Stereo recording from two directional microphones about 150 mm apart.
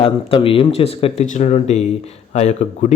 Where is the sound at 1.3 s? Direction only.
50° left (ahead or behind).